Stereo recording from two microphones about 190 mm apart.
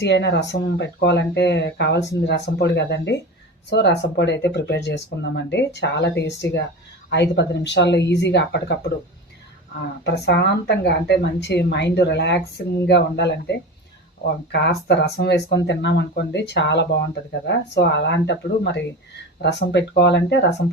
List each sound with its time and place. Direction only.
0.0 s a woman's voice: 65° left (ahead or behind)
10.0 s speech: 65° left (ahead or behind)